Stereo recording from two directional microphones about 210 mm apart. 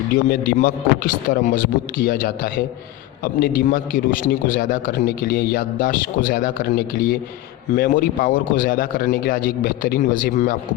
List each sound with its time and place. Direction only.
0.3 s a man's voice: 40° left (ahead or behind)